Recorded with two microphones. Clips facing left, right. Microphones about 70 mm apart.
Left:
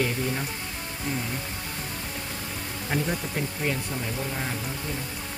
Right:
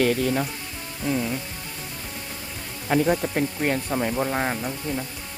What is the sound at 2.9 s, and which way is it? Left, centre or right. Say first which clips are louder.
Speech: right 7 dB; right.